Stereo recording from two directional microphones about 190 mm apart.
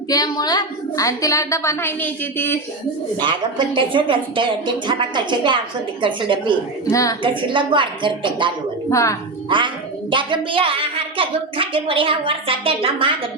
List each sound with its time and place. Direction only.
0.1 s a woman's voice: 20° left (ahead or behind)
3.2 s a woman's voice: 25° right (ahead or behind)
6.9 s a woman's voice: 15° left (ahead or behind)
7.2 s a woman's voice: 25° right (ahead or behind)
8.9 s a woman's voice: 15° left (ahead or behind)
9.5 s a woman's voice: 25° right (ahead or behind)